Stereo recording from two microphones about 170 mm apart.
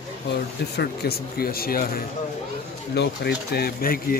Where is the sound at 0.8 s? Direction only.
65° left (ahead or behind).